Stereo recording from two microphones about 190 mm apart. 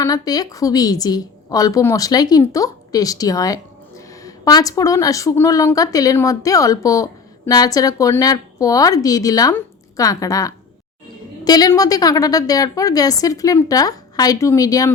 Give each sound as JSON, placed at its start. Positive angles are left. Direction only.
{"t": 0.0, "sound": "a woman's voice", "side_deg": 20}